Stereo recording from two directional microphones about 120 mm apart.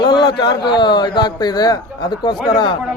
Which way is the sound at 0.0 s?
40° left (ahead or behind).